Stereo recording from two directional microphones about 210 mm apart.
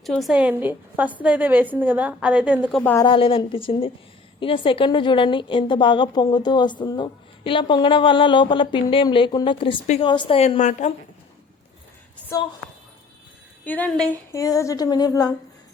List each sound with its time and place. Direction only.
0.0 s a woman's voice: centre (ahead or behind)
2.8 s a woman's voice: 10° left (ahead or behind)
3.1 s a woman's voice: 25° left (ahead or behind)
13.7 s a woman's voice: 5° left (ahead or behind)
14.3 s a woman's voice: 15° left (ahead or behind)